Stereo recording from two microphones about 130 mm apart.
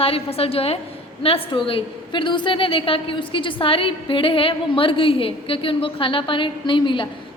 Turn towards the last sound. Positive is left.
turn(degrees=40)  # may be behind; listen again after turning